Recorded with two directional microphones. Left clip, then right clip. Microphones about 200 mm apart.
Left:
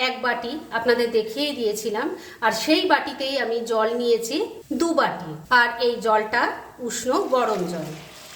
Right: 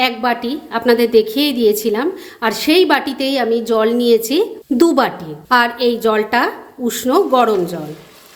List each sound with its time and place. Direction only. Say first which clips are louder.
0.0 s a woman's voice: right 7 dB; 40° right (ahead or behind)